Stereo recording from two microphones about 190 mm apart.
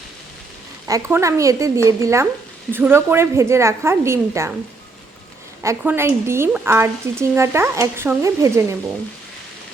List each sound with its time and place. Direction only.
0.9 s speech: 15° right (ahead or behind)
5.6 s speech: 10° right (ahead or behind)